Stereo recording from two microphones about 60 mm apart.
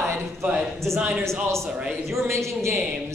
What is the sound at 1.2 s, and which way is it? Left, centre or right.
A woman's voice, right.